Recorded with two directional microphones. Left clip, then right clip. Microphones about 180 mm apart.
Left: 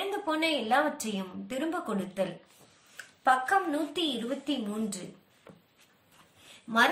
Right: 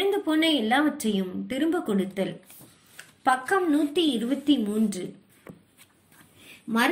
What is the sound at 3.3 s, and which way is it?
Speech, 25° right (ahead or behind).